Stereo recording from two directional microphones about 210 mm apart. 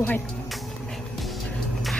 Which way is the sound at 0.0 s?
10° left (ahead or behind).